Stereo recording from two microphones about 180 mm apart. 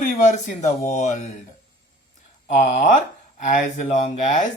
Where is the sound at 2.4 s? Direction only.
40° left (ahead or behind).